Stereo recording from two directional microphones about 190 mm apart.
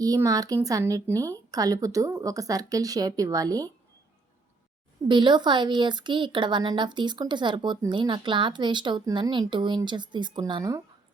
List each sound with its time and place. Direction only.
0.0 s speech: 20° right (ahead or behind)
5.0 s speech: 25° right (ahead or behind)